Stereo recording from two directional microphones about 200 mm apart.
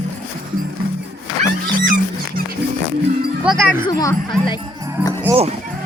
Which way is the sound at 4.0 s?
20° left (ahead or behind).